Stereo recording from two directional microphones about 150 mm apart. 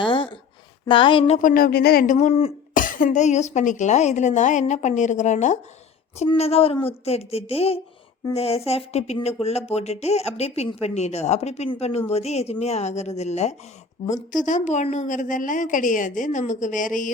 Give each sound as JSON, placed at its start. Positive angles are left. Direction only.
{"t": 0.0, "sound": "a sound", "side_deg": 35}
{"t": 1.4, "sound": "a woman's voice", "side_deg": 65}
{"t": 2.1, "sound": "speech", "side_deg": 45}
{"t": 2.7, "sound": "a woman's voice", "side_deg": 65}